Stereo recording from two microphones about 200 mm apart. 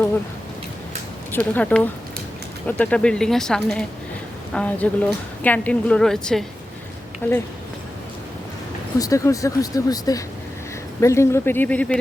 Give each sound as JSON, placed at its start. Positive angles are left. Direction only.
{"t": 1.3, "sound": "speech", "side_deg": 10}
{"t": 9.0, "sound": "speech", "side_deg": 15}